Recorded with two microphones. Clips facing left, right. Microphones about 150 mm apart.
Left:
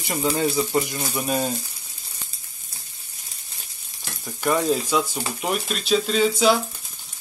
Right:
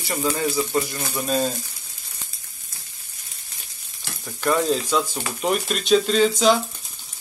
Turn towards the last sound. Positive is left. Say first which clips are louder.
# right 1 dB
turn(degrees=5)  # may be behind; listen again after turning